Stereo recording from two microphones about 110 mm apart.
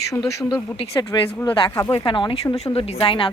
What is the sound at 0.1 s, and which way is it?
Speech, 35° left (ahead or behind).